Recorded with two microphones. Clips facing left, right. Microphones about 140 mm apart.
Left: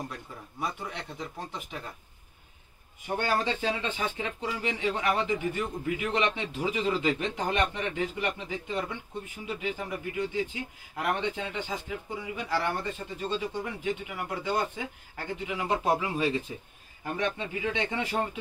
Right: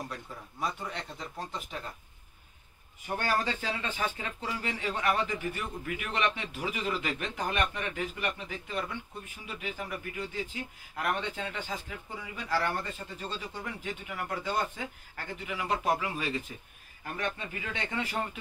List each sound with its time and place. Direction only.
0.6 s speech: 10° left (ahead or behind)
3.2 s speech: 20° left (ahead or behind)